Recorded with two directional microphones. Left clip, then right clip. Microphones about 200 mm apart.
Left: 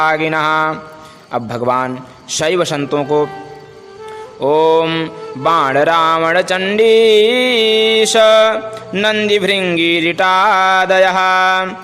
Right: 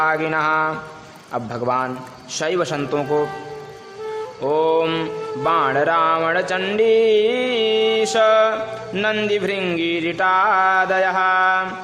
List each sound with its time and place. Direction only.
0.0 s music: 25° left (ahead or behind)
4.4 s music: 30° left (ahead or behind)